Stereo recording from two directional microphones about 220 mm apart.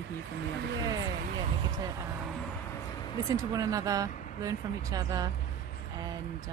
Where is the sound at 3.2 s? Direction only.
15° right (ahead or behind).